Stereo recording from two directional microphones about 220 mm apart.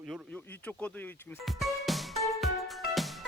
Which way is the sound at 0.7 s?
5° left (ahead or behind).